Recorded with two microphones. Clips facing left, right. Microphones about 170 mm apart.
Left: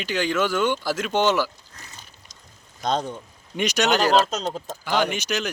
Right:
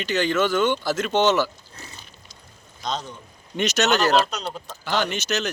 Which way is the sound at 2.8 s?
50° left (ahead or behind).